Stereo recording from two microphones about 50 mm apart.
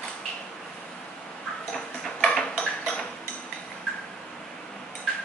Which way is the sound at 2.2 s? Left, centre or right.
Centre.